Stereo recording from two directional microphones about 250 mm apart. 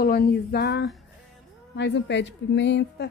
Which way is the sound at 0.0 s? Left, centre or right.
Left.